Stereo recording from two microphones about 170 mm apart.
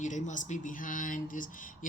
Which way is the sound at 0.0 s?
45° left (ahead or behind).